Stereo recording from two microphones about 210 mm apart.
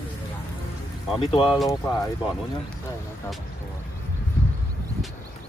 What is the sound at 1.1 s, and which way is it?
Speech, 25° left (ahead or behind).